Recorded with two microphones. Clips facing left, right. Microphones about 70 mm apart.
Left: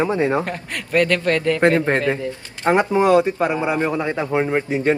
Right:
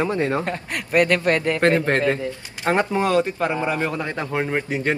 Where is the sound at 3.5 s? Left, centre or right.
Centre.